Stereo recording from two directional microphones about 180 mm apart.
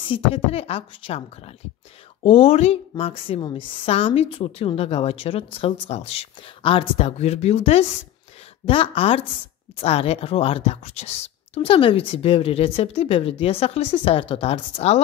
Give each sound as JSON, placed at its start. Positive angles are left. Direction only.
{"t": 0.1, "sound": "a woman's voice", "side_deg": 30}